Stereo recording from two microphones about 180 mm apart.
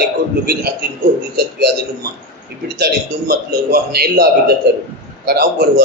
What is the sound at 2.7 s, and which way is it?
A man's voice, 60° right (ahead or behind).